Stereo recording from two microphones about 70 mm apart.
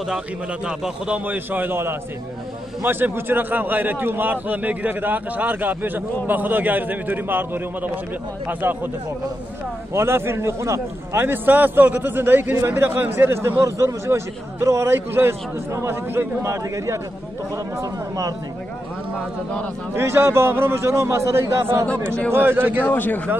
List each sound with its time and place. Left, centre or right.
0.7 s a man's voice: centre
1.2 s a man's voice: right
9.9 s a man's voice: right
16.7 s a man's voice: right
17.7 s speech: right
19.9 s a man's voice: right
22.3 s a man's voice: right
22.8 s speech: left